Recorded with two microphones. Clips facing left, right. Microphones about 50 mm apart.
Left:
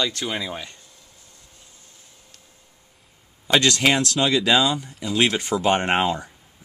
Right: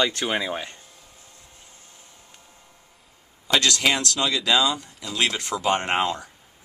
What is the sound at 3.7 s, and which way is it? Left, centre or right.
Speech, centre.